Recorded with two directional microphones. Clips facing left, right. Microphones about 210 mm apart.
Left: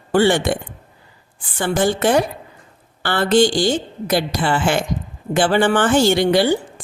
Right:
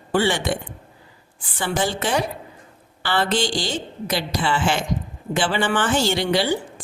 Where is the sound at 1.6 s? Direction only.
50° left (ahead or behind).